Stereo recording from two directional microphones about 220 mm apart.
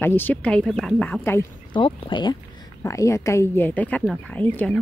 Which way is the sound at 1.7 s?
20° left (ahead or behind).